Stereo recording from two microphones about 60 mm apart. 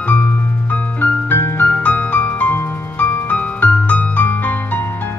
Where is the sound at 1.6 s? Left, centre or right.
Left.